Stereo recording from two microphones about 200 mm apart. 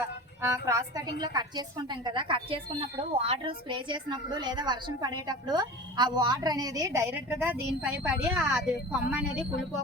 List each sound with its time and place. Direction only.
0.5 s a woman's voice: 15° right (ahead or behind)